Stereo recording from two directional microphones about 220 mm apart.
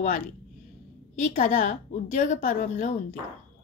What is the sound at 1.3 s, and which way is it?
A woman's voice, 35° left (ahead or behind).